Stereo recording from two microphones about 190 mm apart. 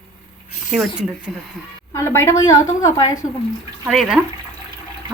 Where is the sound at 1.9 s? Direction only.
15° left (ahead or behind).